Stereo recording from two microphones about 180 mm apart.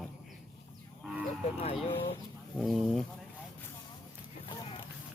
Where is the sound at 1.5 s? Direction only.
35° left (ahead or behind).